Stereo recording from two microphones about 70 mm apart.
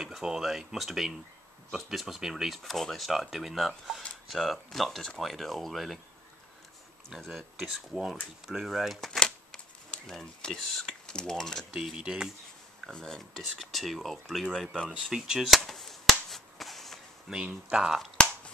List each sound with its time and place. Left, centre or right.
0.0 s speech: centre
7.2 s speech: centre
11.7 s speech: centre
12.9 s speech: centre
15.4 s chop: centre
17.3 s speech: centre
18.1 s finger snapping: centre